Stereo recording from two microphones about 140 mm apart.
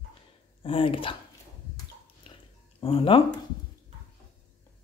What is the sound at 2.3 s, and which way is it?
Dog, 40° left (ahead or behind).